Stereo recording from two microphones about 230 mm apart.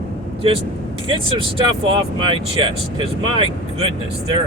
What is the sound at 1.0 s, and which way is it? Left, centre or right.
Speech, right.